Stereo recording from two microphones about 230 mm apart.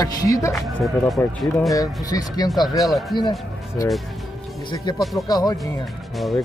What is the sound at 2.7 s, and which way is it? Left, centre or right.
Speech, centre.